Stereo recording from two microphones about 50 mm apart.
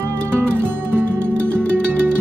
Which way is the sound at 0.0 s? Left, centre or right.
Right.